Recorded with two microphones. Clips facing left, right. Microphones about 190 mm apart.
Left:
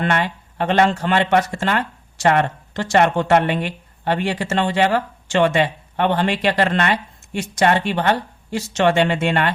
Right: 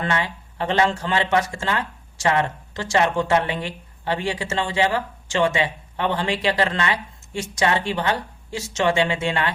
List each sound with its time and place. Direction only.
0.0 s speech: 60° left (ahead or behind)